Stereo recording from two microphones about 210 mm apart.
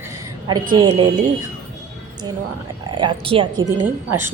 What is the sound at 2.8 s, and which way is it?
Speech, 20° right (ahead or behind).